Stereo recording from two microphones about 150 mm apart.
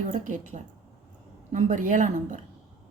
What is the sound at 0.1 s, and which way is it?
Speech, 55° right (ahead or behind).